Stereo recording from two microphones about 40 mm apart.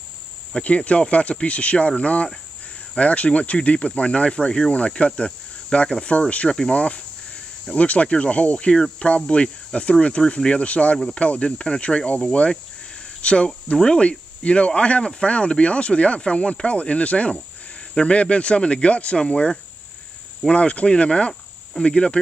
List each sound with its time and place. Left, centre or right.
0.7 s speech: left